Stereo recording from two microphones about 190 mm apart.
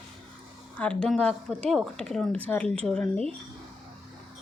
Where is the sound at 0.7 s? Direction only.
5° left (ahead or behind).